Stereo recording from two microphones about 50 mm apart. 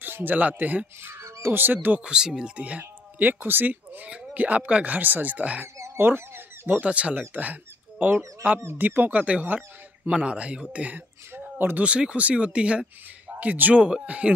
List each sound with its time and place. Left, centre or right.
0.0 s speech: right
1.0 s crow: right
1.4 s speech: right
2.0 s speech: centre
2.5 s speech: right
2.8 s speech: right
5.9 s a sound: right
6.8 s speech: right
10.1 s speech: right
11.0 s speech: right
11.8 s speech: right